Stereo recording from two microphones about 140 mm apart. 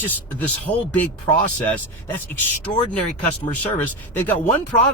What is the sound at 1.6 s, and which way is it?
Speech, 15° left (ahead or behind).